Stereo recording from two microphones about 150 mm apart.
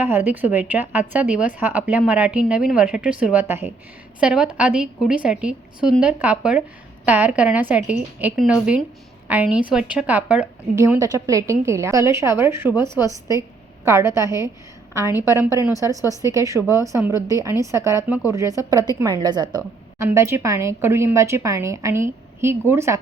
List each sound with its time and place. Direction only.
0.0 s a woman's voice: 15° right (ahead or behind)
10.8 s a woman's voice: 20° right (ahead or behind)
20.1 s a woman's voice: 15° right (ahead or behind)